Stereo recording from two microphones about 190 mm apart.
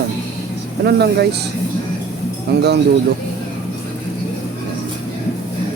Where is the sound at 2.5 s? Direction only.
60° right (ahead or behind).